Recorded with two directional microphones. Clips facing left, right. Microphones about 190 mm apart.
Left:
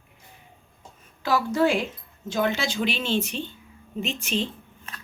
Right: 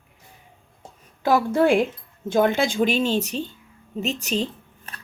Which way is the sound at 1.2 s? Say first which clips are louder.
Right 4 dB; 50° right (ahead or behind).